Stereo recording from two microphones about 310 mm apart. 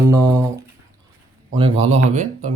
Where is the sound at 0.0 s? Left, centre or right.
Centre.